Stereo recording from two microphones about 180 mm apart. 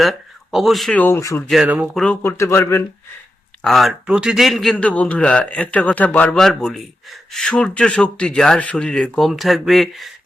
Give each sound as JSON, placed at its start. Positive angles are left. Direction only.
{"t": 0.0, "sound": "speech", "side_deg": 0}
{"t": 1.5, "sound": "a man's voice", "side_deg": -5}
{"t": 2.2, "sound": "a man's voice", "side_deg": 15}
{"t": 3.6, "sound": "a man's voice", "side_deg": 0}